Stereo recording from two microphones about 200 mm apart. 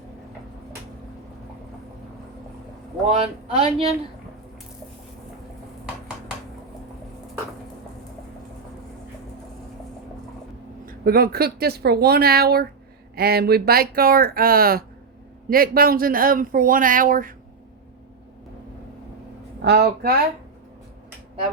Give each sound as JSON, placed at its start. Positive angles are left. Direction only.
{"t": 3.2, "sound": "speech", "side_deg": -30}
{"t": 10.8, "sound": "speech", "side_deg": -50}
{"t": 19.6, "sound": "speech", "side_deg": -55}